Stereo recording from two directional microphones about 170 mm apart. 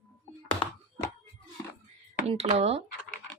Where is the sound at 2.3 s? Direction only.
35° right (ahead or behind).